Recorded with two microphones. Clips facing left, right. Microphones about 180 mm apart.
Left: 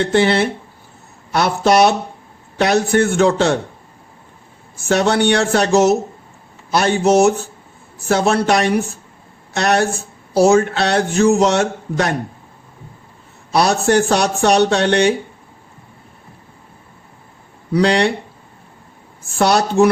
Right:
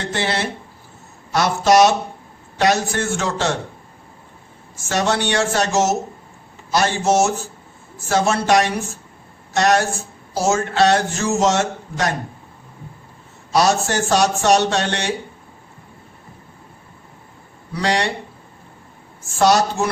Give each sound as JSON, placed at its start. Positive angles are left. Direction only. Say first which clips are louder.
{"t": 0.1, "sound": "speech", "louder": "left 8 dB", "side_deg": 60}
{"t": 4.9, "sound": "speech", "louder": "left 5 dB", "side_deg": 60}
{"t": 13.5, "sound": "speech", "louder": "left 3 dB", "side_deg": 60}
{"t": 17.7, "sound": "speech", "louder": "left 6 dB", "side_deg": 60}
{"t": 19.4, "sound": "speech", "louder": "left 3 dB", "side_deg": 60}